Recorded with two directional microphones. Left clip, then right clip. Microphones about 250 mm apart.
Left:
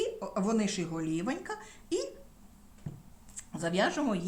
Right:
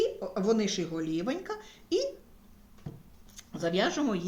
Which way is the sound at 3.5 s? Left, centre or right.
Left.